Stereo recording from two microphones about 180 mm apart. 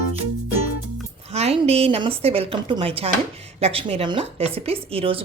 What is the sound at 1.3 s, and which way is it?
A woman's voice, 35° right (ahead or behind).